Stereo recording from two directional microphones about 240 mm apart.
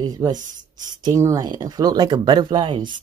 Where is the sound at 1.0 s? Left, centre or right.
Centre.